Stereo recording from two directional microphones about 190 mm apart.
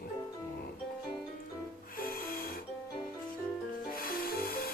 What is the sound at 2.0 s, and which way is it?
Music, 50° left (ahead or behind).